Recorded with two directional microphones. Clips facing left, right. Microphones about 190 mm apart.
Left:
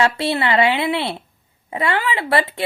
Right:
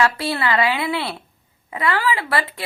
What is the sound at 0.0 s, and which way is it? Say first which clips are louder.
A woman's voice: left 2 dB; 25° left (ahead or behind).